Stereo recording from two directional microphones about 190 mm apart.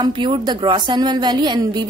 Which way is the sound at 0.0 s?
25° right (ahead or behind).